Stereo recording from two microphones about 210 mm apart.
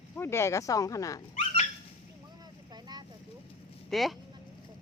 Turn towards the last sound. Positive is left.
turn(degrees=0)  # may be behind; listen again after turning